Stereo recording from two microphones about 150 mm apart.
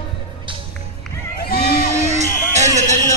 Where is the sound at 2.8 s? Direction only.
50° right (ahead or behind).